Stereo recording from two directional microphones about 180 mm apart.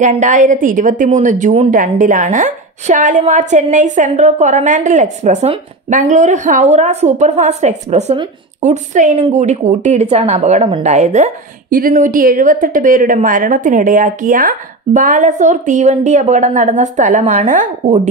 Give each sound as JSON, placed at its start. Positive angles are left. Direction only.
{"t": 0.0, "sound": "a woman's voice", "side_deg": -45}